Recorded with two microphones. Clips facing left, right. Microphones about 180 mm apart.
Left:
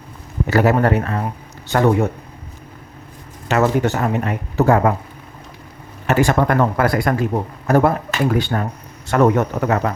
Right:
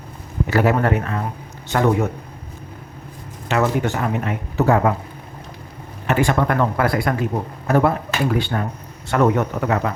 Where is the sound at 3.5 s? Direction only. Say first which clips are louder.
Left 3 dB; 40° left (ahead or behind).